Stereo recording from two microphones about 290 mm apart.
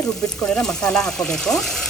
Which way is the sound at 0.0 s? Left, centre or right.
Centre.